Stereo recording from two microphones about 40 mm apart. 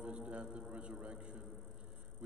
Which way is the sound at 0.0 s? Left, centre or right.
Right.